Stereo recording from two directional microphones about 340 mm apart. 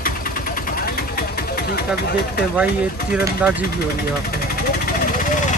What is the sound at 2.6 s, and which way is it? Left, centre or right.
Speech, centre.